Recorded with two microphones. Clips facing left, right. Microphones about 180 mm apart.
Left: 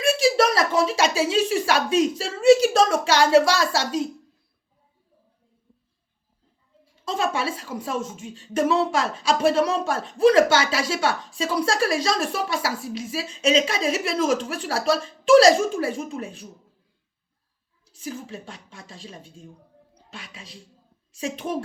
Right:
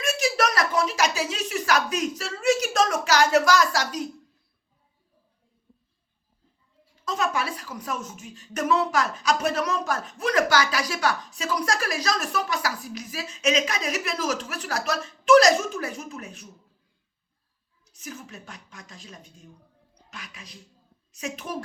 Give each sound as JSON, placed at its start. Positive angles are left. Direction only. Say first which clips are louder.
{"t": 0.0, "sound": "speech", "louder": "left 6 dB", "side_deg": 30}
{"t": 7.0, "sound": "speech", "louder": "left 2 dB", "side_deg": 30}
{"t": 17.9, "sound": "a woman's voice", "louder": "left 6 dB", "side_deg": 30}